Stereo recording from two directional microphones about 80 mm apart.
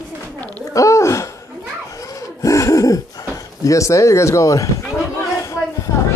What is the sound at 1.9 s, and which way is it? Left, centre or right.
Gasp, left.